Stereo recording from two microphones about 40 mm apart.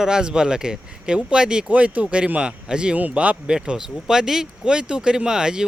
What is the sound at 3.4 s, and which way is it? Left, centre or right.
A man's voice, right.